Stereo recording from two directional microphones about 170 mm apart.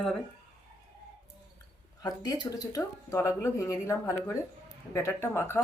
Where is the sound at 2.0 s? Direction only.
25° left (ahead or behind).